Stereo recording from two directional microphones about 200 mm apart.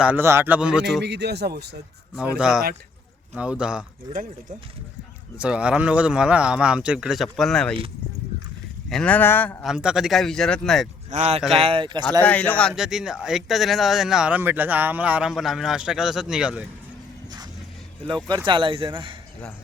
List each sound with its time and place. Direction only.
0.0 s speech: 10° right (ahead or behind)
1.0 s speech: 55° right (ahead or behind)
2.1 s speech: 5° right (ahead or behind)
4.1 s speech: 20° right (ahead or behind)
5.4 s speech: 5° right (ahead or behind)
8.9 s speech: 5° left (ahead or behind)
9.6 s speech: 5° right (ahead or behind)
11.1 s speech: 30° right (ahead or behind)
12.2 s speech: 10° left (ahead or behind)
18.0 s speech: 25° right (ahead or behind)